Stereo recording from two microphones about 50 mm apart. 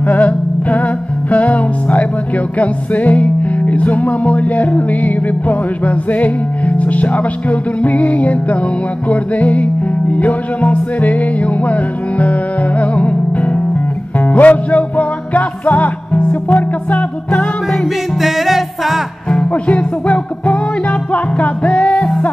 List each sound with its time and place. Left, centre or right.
0.1 s music: left
18.2 s music: centre
19.3 s music: left